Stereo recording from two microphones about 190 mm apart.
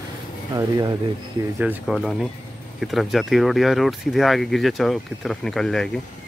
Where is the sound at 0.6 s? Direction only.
20° right (ahead or behind).